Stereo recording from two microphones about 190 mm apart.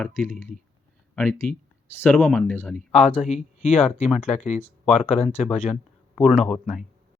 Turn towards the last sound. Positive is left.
turn(degrees=0)  # may be behind; listen again after turning